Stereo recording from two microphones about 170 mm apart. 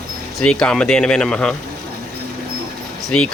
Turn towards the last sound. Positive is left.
turn(degrees=5)  # may be behind; listen again after turning